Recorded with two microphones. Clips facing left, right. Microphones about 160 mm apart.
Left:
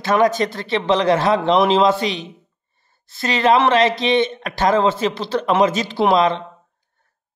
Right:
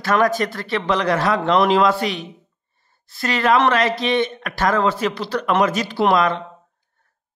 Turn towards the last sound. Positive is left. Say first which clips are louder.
# left 2 dB
turn(degrees=25)  # may be behind; listen again after turning